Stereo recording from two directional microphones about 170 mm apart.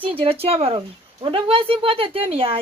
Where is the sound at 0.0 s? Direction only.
35° right (ahead or behind).